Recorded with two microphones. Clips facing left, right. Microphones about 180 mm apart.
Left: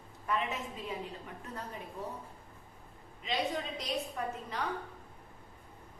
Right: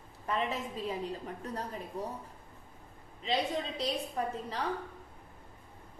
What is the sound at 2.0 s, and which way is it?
Speech, 35° right (ahead or behind).